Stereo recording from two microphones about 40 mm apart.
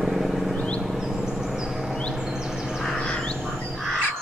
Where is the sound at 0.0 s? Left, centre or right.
Centre.